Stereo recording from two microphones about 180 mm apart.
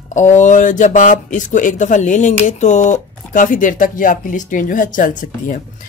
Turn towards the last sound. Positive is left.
turn(degrees=45)  # may be behind; listen again after turning